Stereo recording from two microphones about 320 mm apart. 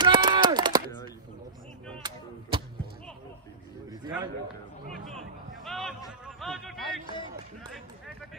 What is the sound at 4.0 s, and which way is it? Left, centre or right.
Speech, centre.